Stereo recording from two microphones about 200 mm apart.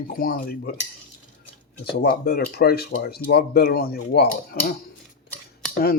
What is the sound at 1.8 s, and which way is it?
Speech, 55° left (ahead or behind).